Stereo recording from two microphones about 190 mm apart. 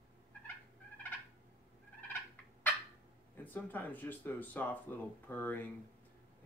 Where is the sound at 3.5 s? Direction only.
10° left (ahead or behind).